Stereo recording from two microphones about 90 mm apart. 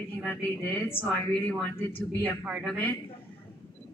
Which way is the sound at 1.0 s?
20° left (ahead or behind).